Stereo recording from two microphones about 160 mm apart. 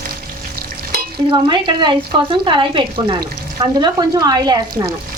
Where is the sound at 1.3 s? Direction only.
30° right (ahead or behind).